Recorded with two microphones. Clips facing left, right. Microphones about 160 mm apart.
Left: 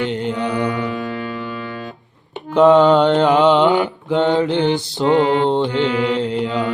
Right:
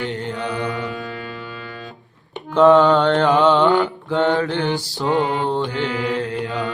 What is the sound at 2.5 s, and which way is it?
Mantra, 20° left (ahead or behind).